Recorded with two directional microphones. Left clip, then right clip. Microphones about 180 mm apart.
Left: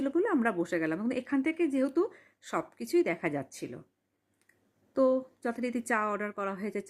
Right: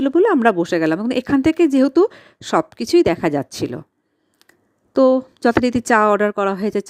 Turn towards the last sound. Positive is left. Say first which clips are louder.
# right 15 dB
turn(degrees=-45)  # may be behind; listen again after turning